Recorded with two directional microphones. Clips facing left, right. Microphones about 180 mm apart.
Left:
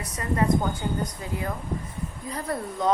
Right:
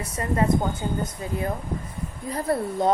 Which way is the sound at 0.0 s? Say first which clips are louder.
Right 2 dB; 25° right (ahead or behind).